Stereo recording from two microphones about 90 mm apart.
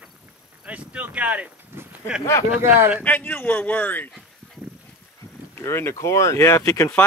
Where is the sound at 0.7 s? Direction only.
15° right (ahead or behind).